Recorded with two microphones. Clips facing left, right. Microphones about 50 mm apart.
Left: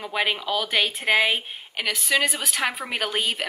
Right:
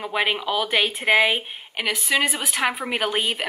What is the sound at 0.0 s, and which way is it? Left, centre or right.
A woman's voice, centre.